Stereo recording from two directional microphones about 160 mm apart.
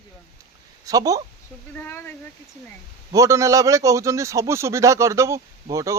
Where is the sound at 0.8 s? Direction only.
20° right (ahead or behind).